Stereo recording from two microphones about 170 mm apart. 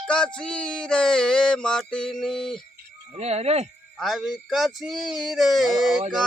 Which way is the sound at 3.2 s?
40° right (ahead or behind).